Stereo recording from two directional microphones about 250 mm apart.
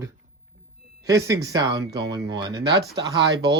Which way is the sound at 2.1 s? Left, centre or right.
Centre.